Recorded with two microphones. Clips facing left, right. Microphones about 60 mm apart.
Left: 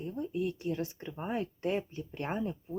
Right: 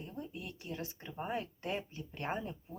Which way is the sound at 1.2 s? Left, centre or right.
Left.